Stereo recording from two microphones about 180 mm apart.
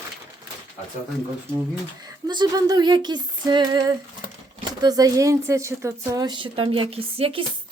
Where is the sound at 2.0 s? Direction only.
25° right (ahead or behind).